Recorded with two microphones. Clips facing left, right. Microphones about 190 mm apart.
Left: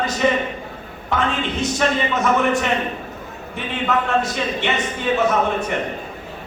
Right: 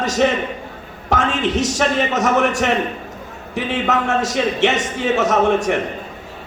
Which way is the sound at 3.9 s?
80° right.